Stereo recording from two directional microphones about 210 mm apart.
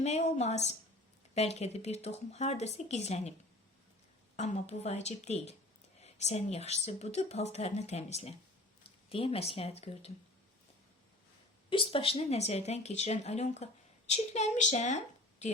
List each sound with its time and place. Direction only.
0.0 s speech: 30° left (ahead or behind)
4.4 s speech: 35° left (ahead or behind)
11.7 s a woman's voice: 25° left (ahead or behind)